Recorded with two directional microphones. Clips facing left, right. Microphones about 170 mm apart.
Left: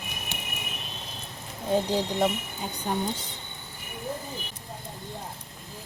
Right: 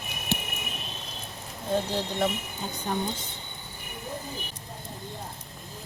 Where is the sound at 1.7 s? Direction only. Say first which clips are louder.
Left 3 dB; 15° left (ahead or behind).